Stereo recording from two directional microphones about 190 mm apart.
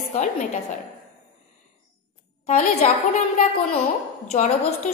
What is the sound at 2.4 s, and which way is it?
A woman's voice, 40° left (ahead or behind).